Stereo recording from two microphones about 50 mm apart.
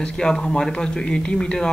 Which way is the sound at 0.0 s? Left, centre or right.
Centre.